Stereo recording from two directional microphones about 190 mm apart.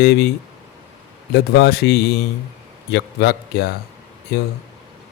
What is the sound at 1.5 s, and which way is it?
Speech, 55° left (ahead or behind).